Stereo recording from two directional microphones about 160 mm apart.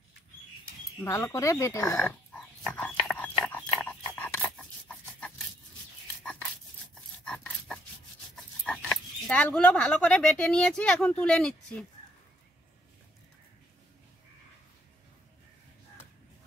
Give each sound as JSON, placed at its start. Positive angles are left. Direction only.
{"t": 1.0, "sound": "speech", "side_deg": 15}
{"t": 2.0, "sound": "dog", "side_deg": 5}
{"t": 7.2, "sound": "dog", "side_deg": 5}
{"t": 9.3, "sound": "speech", "side_deg": 10}